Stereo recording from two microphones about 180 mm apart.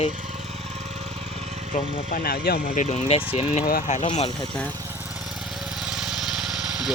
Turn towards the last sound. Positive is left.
turn(degrees=0)  # may be behind; listen again after turning